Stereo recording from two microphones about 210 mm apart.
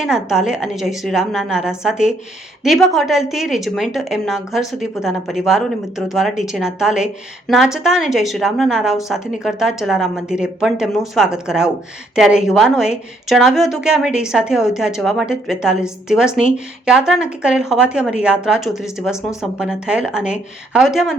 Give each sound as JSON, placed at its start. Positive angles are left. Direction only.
{"t": 0.0, "sound": "speech", "side_deg": -5}